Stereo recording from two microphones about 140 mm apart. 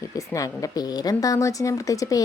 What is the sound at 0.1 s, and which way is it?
Speech, 25° left (ahead or behind).